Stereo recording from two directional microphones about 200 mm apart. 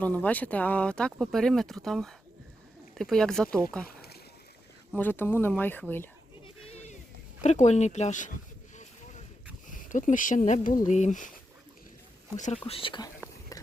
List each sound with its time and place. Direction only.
0.0 s speech: 10° left (ahead or behind)
4.9 s speech: 10° left (ahead or behind)
6.7 s a sound: 30° left (ahead or behind)
7.4 s speech: 35° left (ahead or behind)
9.6 s speech: 40° left (ahead or behind)
12.6 s speech: 25° left (ahead or behind)